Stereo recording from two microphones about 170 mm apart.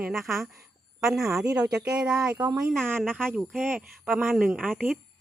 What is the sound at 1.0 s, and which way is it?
Speech, 5° right (ahead or behind).